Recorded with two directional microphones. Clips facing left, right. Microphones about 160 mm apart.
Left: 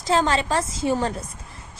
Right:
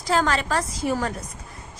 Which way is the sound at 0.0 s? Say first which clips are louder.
Left 2 dB; 25° left (ahead or behind).